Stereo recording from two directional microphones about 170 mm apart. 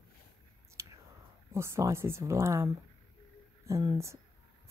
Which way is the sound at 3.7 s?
20° right (ahead or behind).